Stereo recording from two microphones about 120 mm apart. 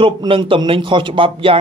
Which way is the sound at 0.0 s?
45° right (ahead or behind).